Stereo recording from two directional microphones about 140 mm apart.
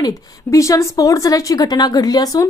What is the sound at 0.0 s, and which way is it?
A woman's voice, 20° left (ahead or behind).